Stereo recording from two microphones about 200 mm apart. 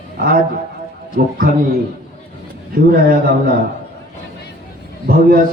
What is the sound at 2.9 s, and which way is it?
Mantra, 45° right (ahead or behind).